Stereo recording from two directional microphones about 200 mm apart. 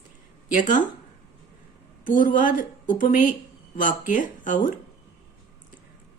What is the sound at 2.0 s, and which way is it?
A woman's voice, 40° left (ahead or behind).